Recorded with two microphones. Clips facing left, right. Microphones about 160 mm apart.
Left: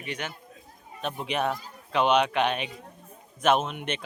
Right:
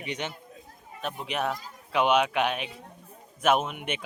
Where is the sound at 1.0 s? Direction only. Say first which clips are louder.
Left 2 dB; centre (ahead or behind).